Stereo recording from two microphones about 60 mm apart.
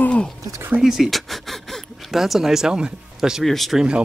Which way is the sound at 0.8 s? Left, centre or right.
Centre.